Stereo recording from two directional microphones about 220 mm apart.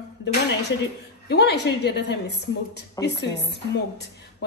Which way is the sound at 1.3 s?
50° left (ahead or behind).